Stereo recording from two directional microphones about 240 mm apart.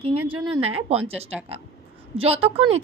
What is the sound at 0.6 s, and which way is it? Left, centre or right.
A woman's voice, right.